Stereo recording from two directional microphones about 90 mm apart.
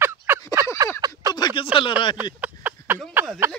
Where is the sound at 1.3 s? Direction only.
50° left (ahead or behind).